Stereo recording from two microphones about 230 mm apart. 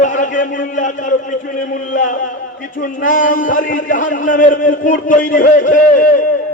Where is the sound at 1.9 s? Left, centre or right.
Left.